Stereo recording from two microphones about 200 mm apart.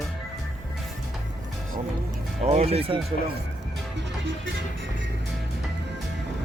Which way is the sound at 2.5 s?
30° right (ahead or behind).